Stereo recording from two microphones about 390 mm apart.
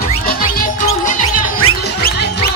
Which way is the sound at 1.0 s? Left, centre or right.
Centre.